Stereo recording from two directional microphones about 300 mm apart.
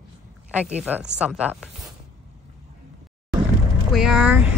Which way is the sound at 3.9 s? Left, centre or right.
Centre.